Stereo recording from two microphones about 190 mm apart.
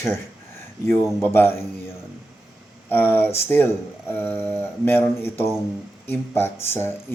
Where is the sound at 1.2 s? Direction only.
10° left (ahead or behind).